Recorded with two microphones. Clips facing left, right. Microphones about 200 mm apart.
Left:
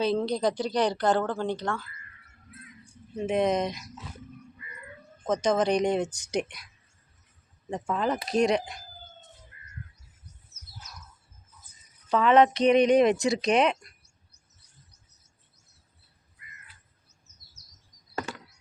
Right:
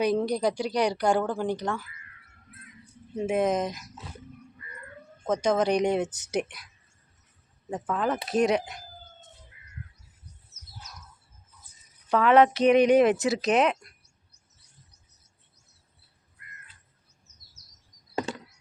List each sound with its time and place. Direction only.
0.3 s speech: 10° right (ahead or behind)
3.2 s speech: 10° right (ahead or behind)
5.2 s speech: 10° right (ahead or behind)
7.7 s speech: 5° right (ahead or behind)
9.5 s a sound: 5° right (ahead or behind)
12.0 s speech: 10° right (ahead or behind)
18.1 s chop: 20° right (ahead or behind)